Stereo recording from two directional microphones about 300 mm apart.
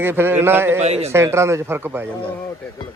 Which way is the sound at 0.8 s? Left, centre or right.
Right.